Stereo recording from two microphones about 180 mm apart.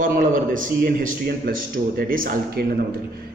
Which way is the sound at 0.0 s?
50° right (ahead or behind).